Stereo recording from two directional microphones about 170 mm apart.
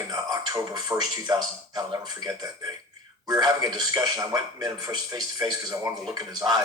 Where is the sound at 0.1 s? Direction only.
25° right (ahead or behind).